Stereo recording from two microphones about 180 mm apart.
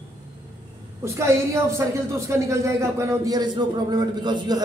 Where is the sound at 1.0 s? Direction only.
15° right (ahead or behind).